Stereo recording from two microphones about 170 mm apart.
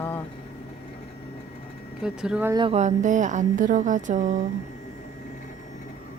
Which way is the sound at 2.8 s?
45° right (ahead or behind).